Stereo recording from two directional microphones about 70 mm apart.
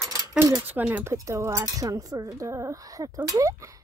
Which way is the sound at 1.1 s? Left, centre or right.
Right.